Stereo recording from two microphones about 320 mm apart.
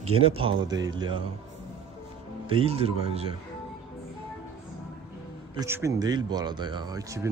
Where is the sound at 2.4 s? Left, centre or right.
Centre.